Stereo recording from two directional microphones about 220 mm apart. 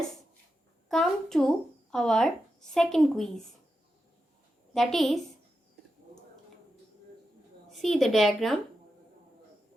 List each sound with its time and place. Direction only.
0.9 s speech: centre (ahead or behind)
4.7 s speech: centre (ahead or behind)
7.7 s speech: centre (ahead or behind)